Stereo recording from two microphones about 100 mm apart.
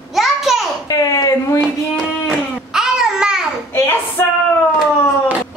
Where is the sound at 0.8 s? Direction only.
35° left (ahead or behind).